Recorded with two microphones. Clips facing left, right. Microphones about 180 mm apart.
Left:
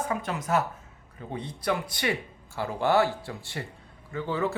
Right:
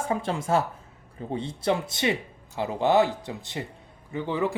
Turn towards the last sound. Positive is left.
turn(degrees=-15)  # may be behind; listen again after turning